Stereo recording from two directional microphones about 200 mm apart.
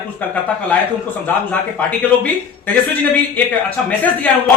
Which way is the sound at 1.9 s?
10° left (ahead or behind).